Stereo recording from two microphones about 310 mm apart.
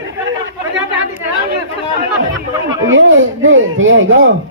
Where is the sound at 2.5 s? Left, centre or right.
Centre.